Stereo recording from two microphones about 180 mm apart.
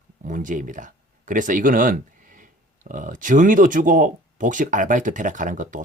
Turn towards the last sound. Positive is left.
turn(degrees=-45)  # may be behind; listen again after turning